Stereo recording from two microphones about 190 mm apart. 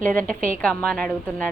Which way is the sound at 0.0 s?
45° right (ahead or behind).